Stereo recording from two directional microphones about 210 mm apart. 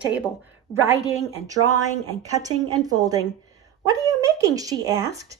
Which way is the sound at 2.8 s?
15° right (ahead or behind).